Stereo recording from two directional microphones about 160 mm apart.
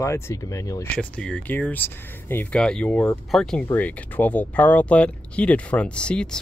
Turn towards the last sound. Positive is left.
turn(degrees=5)  # may be behind; listen again after turning